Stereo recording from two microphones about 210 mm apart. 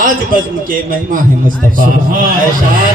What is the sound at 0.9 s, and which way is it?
Music, 40° right (ahead or behind).